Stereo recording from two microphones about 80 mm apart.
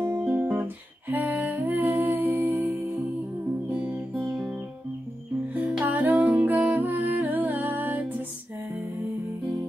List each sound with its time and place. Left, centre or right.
0.0 s music: right
4.3 s music: centre
5.5 s music: centre